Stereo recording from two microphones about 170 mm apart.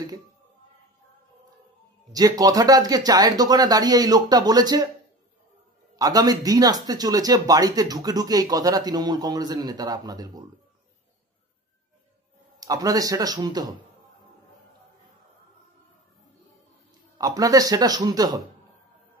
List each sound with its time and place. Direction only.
2.1 s speech: 20° right (ahead or behind)
5.9 s speech: 20° right (ahead or behind)
12.5 s speech: 20° right (ahead or behind)
17.2 s speech: 20° right (ahead or behind)